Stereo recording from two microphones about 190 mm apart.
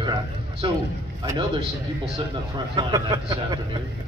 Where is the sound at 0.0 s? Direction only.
20° right (ahead or behind).